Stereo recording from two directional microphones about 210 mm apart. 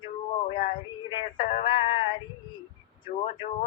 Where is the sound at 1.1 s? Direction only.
25° left (ahead or behind).